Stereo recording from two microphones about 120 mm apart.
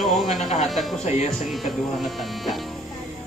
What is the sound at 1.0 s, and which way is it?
Speech, 70° left (ahead or behind).